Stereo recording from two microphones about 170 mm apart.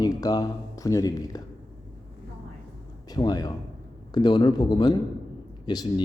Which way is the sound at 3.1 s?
25° left (ahead or behind).